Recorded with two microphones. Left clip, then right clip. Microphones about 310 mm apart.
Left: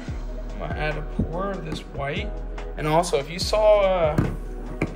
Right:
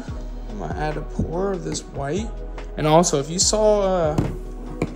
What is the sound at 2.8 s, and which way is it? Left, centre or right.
Speech, right.